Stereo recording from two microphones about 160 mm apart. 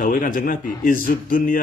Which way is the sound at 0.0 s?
55° left (ahead or behind).